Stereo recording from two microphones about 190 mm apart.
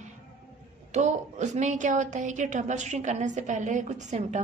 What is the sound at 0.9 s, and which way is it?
A woman's voice, 40° right (ahead or behind).